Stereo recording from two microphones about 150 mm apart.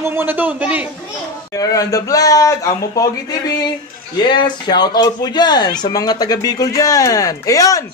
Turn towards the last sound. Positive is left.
turn(degrees=25)  # may be behind; listen again after turning